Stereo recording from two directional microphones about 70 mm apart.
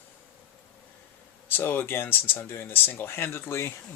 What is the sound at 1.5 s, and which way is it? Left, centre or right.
Speech, left.